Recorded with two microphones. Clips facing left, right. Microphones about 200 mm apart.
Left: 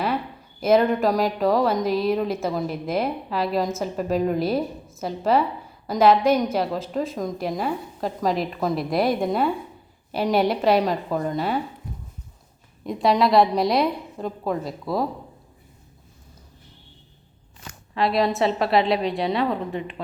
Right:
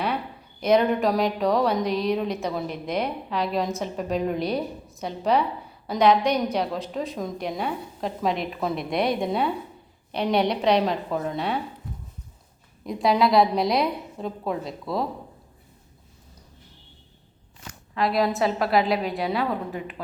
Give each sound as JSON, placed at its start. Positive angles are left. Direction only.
{"t": 0.6, "sound": "a woman's voice", "side_deg": 5}
{"t": 12.8, "sound": "a woman's voice", "side_deg": 0}
{"t": 17.9, "sound": "a woman's voice", "side_deg": 0}